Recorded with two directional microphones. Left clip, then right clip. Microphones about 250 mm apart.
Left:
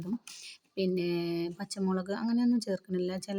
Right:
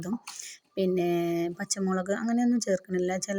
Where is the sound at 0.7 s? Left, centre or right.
Centre.